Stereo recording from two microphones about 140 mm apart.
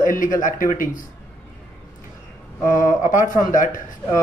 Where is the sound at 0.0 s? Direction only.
70° left (ahead or behind).